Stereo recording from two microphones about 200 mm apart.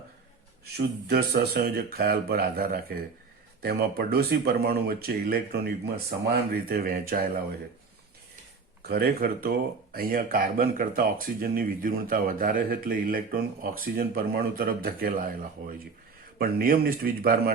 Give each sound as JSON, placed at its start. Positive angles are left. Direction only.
{"t": 0.6, "sound": "speech", "side_deg": -50}
{"t": 8.9, "sound": "speech", "side_deg": -50}